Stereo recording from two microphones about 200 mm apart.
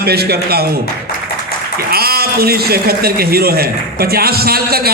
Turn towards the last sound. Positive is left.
turn(degrees=-50)  # may be behind; listen again after turning